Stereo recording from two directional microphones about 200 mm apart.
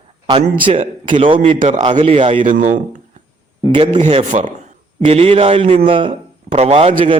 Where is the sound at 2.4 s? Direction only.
35° right (ahead or behind).